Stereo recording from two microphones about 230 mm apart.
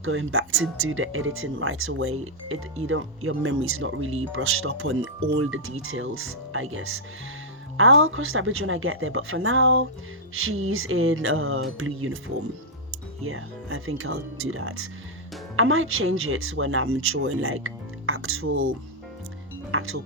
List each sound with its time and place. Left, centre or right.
0.0 s speech: right
13.2 s speech: right
19.7 s speech: right